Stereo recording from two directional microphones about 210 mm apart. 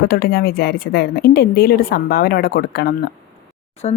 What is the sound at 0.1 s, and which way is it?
A woman's voice, 45° left (ahead or behind).